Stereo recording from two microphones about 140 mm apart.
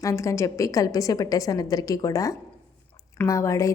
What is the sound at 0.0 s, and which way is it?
A woman's voice, 20° left (ahead or behind).